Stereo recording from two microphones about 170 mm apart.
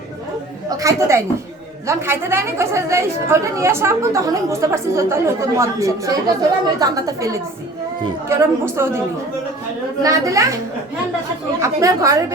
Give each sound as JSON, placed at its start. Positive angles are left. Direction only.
{"t": 0.8, "sound": "a woman's voice", "side_deg": -20}
{"t": 10.0, "sound": "a woman's voice", "side_deg": -20}
{"t": 11.6, "sound": "a woman's voice", "side_deg": -20}